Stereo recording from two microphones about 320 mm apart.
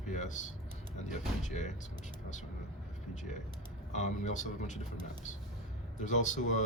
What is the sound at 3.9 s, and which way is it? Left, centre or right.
Speech, left.